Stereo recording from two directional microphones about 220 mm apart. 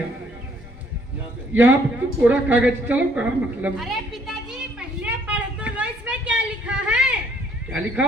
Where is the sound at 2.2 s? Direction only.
5° right (ahead or behind).